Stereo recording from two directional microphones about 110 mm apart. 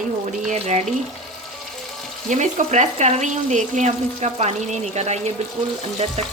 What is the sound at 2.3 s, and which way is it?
Frying, 90° right.